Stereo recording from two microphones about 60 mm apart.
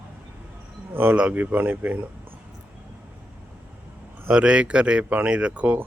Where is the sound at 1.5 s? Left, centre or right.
Right.